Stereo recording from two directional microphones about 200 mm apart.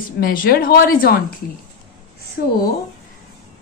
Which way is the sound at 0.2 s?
45° left (ahead or behind).